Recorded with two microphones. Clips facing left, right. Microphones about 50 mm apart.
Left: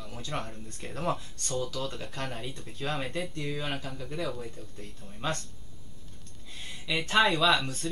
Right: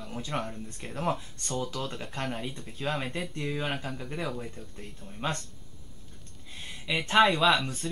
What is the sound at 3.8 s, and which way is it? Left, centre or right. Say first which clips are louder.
Speech: even; right.